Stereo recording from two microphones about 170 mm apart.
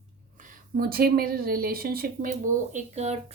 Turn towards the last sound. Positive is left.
turn(degrees=-40)  # may be behind; listen again after turning